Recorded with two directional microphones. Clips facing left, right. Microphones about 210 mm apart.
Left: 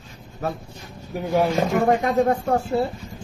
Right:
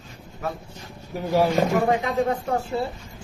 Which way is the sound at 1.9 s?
45° left (ahead or behind).